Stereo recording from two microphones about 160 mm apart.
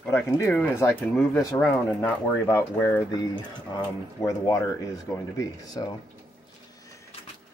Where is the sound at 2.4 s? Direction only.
20° left (ahead or behind).